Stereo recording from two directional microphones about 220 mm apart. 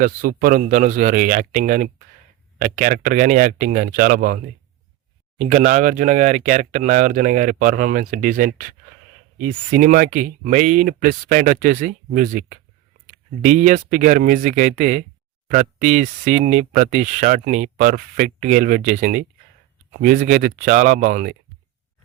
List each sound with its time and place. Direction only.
0.0 s speech: 40° right (ahead or behind)
5.4 s speech: 35° right (ahead or behind)